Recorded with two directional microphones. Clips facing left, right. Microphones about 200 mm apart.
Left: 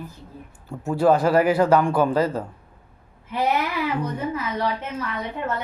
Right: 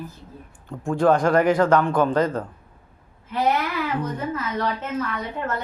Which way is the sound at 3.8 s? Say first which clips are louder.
Left 1 dB; 10° left (ahead or behind).